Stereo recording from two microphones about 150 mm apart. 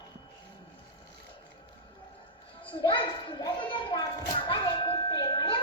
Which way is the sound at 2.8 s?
35° left (ahead or behind).